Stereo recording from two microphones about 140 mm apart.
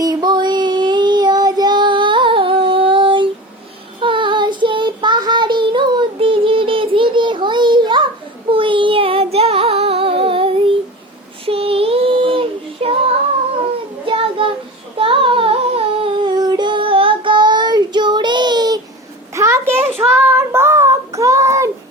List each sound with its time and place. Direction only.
0.0 s child singing: 30° right (ahead or behind)
8.4 s music: 40° right (ahead or behind)
11.4 s child singing: 40° right (ahead or behind)
14.0 s child singing: 40° right (ahead or behind)
19.3 s a sound: 20° right (ahead or behind)
20.0 s child singing: 15° right (ahead or behind)